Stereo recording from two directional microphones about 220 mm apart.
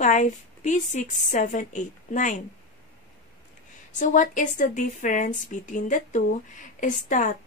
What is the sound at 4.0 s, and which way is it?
Speech, 35° left (ahead or behind).